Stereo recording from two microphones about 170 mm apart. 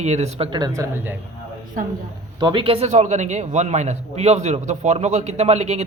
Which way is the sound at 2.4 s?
30° right (ahead or behind).